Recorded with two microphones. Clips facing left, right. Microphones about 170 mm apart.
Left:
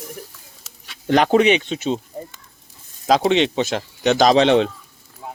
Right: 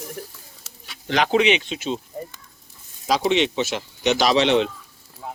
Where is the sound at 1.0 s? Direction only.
45° left (ahead or behind).